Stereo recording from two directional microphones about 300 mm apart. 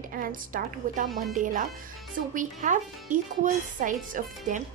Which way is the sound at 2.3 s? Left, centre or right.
Right.